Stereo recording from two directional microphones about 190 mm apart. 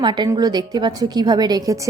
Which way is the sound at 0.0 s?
20° right (ahead or behind).